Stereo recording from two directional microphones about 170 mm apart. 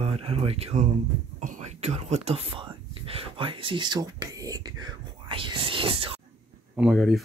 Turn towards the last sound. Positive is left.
turn(degrees=0)  # may be behind; listen again after turning